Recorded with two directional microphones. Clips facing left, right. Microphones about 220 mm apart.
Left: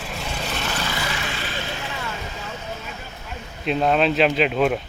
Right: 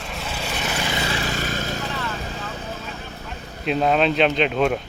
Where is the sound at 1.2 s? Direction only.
40° right (ahead or behind).